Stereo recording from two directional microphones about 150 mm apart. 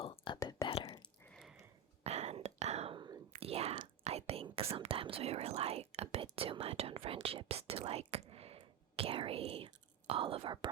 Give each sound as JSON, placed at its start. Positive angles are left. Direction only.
{"t": 0.0, "sound": "whispering", "side_deg": 40}
{"t": 0.3, "sound": "whispering", "side_deg": 20}
{"t": 0.7, "sound": "whispering", "side_deg": 35}
{"t": 1.2, "sound": "a sound", "side_deg": 5}
{"t": 2.0, "sound": "whispering", "side_deg": -45}